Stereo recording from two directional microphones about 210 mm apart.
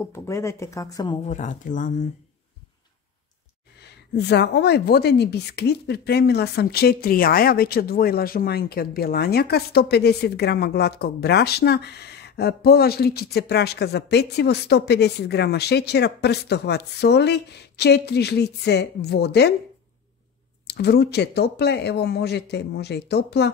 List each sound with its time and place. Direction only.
0.0 s speech: 15° left (ahead or behind)
1.2 s speech: 35° left (ahead or behind)
3.8 s speech: 50° left (ahead or behind)
20.6 s speech: 50° left (ahead or behind)